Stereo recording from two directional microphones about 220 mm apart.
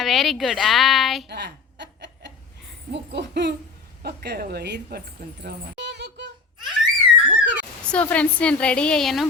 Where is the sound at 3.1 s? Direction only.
50° right (ahead or behind).